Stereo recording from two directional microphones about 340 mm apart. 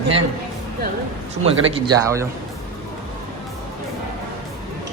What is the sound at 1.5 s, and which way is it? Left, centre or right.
Speech, centre.